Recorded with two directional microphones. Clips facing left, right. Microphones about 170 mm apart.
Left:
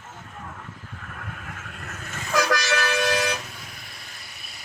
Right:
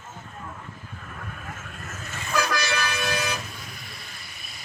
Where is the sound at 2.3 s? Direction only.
85° left.